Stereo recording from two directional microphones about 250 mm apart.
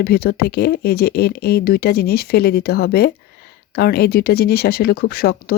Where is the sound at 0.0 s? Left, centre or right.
Left.